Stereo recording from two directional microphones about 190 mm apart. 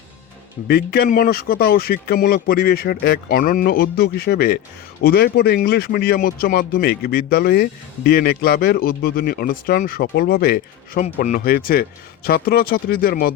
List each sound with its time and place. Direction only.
0.7 s speech: 55° left (ahead or behind)
11.0 s speech: 45° left (ahead or behind)